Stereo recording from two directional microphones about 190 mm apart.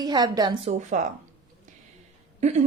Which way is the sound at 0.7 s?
40° right (ahead or behind).